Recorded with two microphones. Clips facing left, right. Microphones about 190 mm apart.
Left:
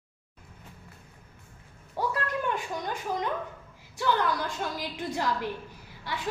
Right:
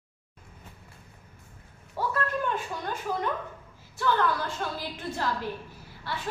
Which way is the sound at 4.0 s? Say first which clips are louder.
Right 1 dB; 15° left (ahead or behind).